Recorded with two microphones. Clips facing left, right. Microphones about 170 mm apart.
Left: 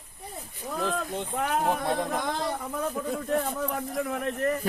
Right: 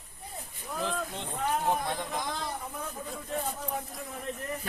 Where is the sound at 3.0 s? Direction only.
85° left.